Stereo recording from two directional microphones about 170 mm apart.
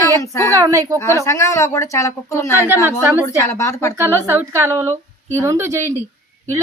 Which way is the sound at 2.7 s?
15° right (ahead or behind).